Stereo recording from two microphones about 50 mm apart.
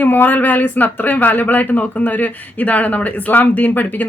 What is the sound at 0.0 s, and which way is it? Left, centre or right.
Speech, left.